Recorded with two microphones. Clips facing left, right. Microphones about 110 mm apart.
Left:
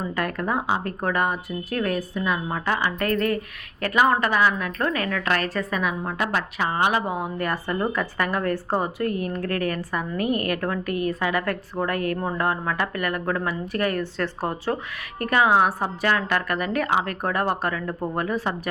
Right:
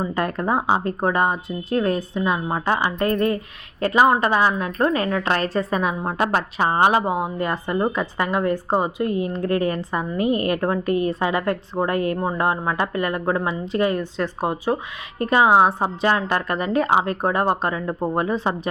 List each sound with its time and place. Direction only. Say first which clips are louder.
0.0 s a woman's voice: right 3 dB; 30° right (ahead or behind)